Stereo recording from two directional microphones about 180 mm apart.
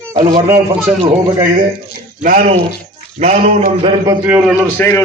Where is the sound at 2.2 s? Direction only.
40° right (ahead or behind).